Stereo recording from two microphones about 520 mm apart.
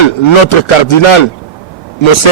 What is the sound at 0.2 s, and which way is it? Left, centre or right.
A man's voice, left.